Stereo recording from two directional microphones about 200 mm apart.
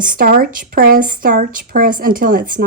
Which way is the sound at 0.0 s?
45° right (ahead or behind).